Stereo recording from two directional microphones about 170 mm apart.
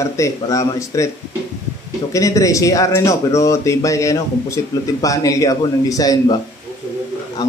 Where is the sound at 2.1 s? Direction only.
20° left (ahead or behind).